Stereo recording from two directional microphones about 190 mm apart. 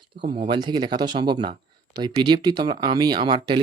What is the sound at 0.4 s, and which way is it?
Speech, 25° right (ahead or behind).